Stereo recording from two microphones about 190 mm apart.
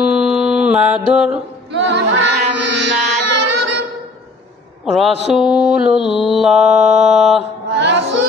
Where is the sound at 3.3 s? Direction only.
65° right (ahead or behind).